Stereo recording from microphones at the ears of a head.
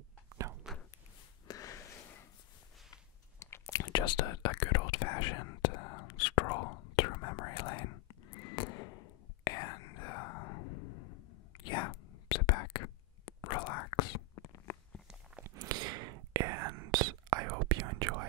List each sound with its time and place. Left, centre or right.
1.5 s a sound: left
2.9 s whispering: left
15.4 s whispering: right